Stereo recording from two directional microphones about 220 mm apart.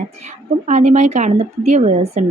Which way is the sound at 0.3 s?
30° right (ahead or behind).